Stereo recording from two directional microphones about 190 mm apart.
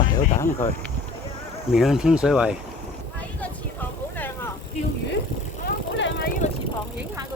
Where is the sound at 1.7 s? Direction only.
Centre (ahead or behind).